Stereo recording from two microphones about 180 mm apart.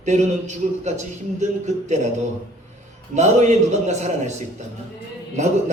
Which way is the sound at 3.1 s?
40° right (ahead or behind).